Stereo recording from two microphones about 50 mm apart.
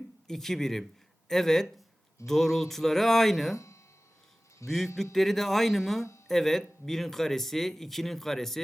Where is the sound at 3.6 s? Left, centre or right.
Left.